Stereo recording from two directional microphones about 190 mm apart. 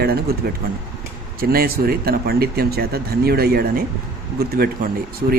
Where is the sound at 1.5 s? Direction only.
50° right (ahead or behind).